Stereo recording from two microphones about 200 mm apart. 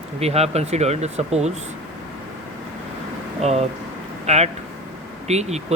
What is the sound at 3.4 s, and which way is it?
Speech, 35° right (ahead or behind).